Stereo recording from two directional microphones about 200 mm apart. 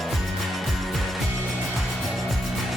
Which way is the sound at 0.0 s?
Centre (ahead or behind).